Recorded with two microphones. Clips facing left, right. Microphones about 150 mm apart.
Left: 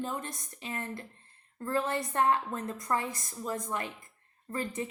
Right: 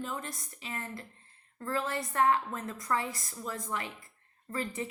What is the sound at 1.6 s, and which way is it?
Speech, 20° left (ahead or behind).